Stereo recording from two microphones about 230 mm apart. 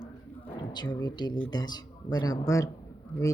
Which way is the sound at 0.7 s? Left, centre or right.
Centre.